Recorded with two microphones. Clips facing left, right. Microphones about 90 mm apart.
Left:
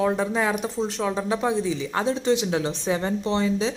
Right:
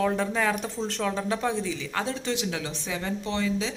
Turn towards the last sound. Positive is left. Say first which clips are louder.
# left 5 dB
turn(degrees=25)  # may be behind; listen again after turning